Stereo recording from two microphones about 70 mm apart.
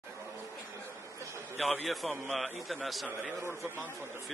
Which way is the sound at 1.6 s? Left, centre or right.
Centre.